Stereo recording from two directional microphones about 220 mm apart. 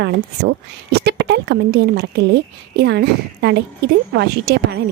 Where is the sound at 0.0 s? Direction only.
50° right (ahead or behind).